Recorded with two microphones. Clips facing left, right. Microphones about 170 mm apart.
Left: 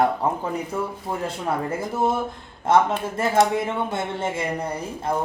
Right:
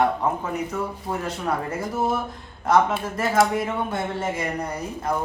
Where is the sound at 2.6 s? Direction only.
25° left (ahead or behind).